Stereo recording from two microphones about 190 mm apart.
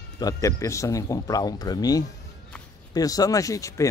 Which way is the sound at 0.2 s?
20° left (ahead or behind).